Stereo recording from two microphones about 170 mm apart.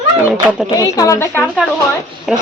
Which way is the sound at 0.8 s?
20° left (ahead or behind).